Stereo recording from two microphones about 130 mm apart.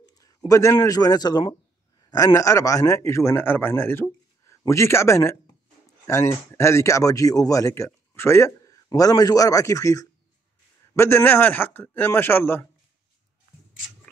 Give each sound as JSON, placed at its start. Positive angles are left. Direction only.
{"t": 0.1, "sound": "a man's voice", "side_deg": 30}